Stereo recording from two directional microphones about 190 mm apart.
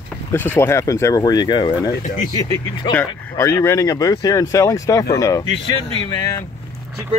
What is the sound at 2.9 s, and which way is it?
Speech, 10° left (ahead or behind).